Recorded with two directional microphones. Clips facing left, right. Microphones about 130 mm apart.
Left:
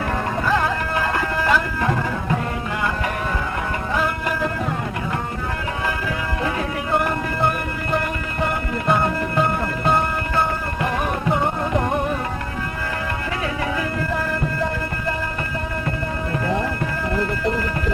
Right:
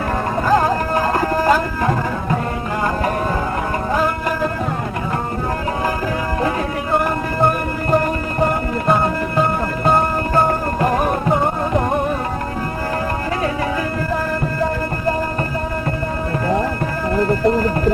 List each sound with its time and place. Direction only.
0.4 s music: 40° right (ahead or behind)
3.9 s music: 40° right (ahead or behind)
7.0 s music: 40° right (ahead or behind)
17.2 s a sound: 40° right (ahead or behind)